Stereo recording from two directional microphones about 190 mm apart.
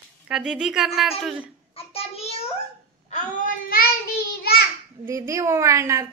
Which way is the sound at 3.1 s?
40° left (ahead or behind).